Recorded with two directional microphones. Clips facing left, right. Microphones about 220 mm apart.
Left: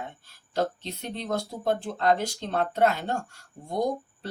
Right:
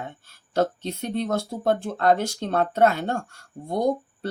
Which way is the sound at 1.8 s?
50° right (ahead or behind).